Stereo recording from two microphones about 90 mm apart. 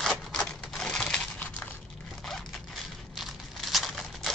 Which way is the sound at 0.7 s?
5° left (ahead or behind).